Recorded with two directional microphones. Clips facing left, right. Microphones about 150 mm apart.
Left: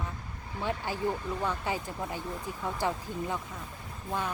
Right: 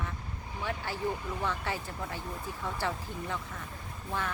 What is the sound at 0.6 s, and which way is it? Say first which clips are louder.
Speech: left 3 dB; 15° left (ahead or behind).